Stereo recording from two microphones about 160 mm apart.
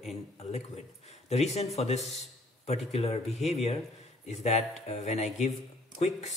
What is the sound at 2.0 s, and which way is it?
Speech, centre (ahead or behind).